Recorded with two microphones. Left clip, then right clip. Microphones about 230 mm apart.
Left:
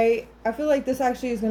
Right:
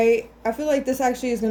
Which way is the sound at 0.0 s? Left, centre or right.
Right.